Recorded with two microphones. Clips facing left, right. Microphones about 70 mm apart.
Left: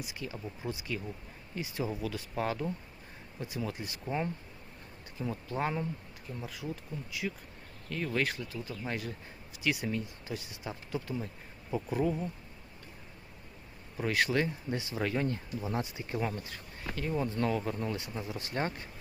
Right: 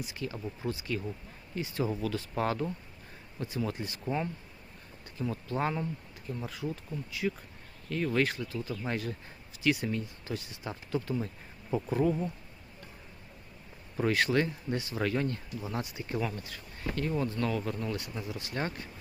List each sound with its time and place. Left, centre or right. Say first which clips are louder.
0.0 s speech: right 3 dB; centre
5.1 s speech: right 2 dB; centre
13.9 s speech: right 2 dB; centre
14.8 s speech: right 2 dB; centre
16.9 s speech: right 1 dB; centre
17.2 s speech: even; left